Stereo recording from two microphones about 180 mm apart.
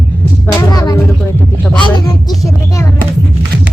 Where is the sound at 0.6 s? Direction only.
20° left (ahead or behind).